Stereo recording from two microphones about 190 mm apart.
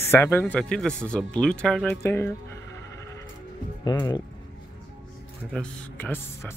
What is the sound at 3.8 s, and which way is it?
Speech, 20° left (ahead or behind).